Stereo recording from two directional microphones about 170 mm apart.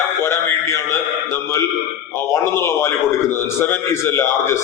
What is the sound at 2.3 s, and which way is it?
A man's voice, 15° left (ahead or behind).